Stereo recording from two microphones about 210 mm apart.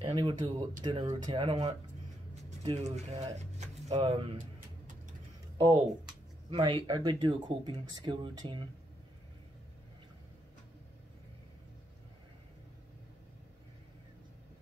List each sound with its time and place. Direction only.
0.0 s speech: 25° right (ahead or behind)
3.3 s vehicle: 35° right (ahead or behind)
6.5 s speech: 25° right (ahead or behind)